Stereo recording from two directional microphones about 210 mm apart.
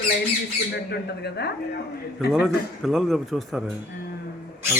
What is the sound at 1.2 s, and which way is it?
Speech, 50° left (ahead or behind).